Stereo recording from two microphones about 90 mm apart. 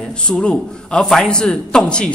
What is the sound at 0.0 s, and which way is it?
A man's voice, 10° left (ahead or behind).